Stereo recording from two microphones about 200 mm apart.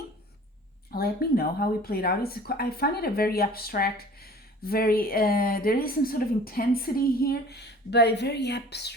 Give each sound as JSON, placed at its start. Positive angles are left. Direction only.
{"t": 0.9, "sound": "speech", "side_deg": 50}